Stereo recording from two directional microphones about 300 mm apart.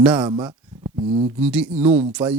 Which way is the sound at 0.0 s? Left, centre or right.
Centre.